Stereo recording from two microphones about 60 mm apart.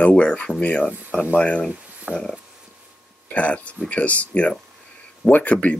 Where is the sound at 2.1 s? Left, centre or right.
Right.